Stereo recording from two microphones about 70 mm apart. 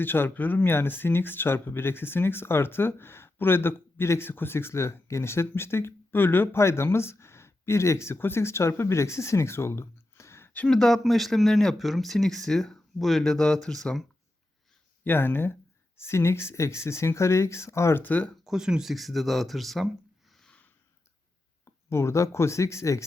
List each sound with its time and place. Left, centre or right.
0.0 s speech: left
10.7 s speech: centre
15.0 s speech: left
18.0 s speech: left
18.4 s speech: centre
20.4 s a sound: centre
21.6 s speech: left